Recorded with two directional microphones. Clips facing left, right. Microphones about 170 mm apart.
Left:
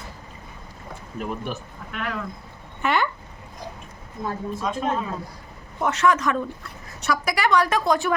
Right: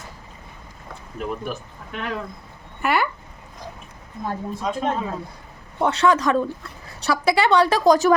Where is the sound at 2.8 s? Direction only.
10° right (ahead or behind).